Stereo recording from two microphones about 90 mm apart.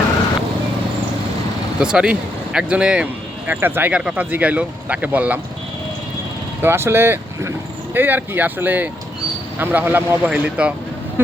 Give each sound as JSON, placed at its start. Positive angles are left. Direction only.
{"t": 1.8, "sound": "speech", "side_deg": -10}
{"t": 6.6, "sound": "speech", "side_deg": -30}